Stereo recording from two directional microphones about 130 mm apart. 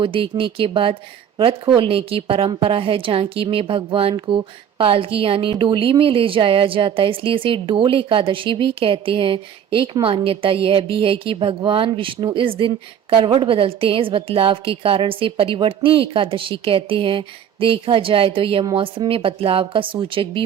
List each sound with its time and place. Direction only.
0.0 s a woman's voice: 45° right (ahead or behind)